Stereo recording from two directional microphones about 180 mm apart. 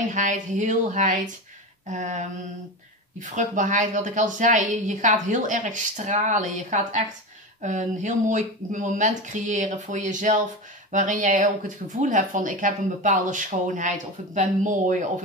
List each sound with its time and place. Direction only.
0.1 s speech: 45° right (ahead or behind)